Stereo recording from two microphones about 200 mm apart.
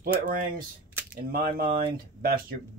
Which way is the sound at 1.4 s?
45° right (ahead or behind).